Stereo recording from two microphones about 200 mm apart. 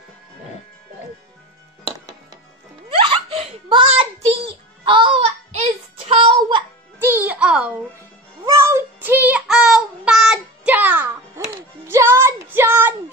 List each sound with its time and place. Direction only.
3.1 s a sound: 30° right (ahead or behind)
7.0 s music: 10° right (ahead or behind)
8.5 s child singing: 15° right (ahead or behind)
11.5 s music: 10° right (ahead or behind)